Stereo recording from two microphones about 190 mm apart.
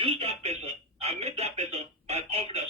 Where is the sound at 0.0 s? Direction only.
30° right (ahead or behind).